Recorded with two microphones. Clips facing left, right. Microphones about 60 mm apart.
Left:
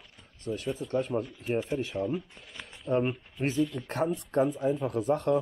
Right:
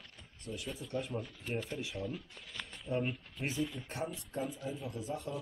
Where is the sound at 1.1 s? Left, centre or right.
Left.